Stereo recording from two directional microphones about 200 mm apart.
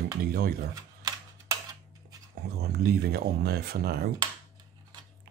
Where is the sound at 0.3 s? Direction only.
50° right (ahead or behind).